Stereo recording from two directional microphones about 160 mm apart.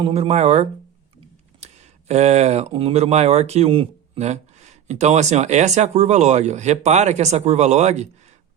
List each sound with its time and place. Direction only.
0.0 s speech: 40° right (ahead or behind)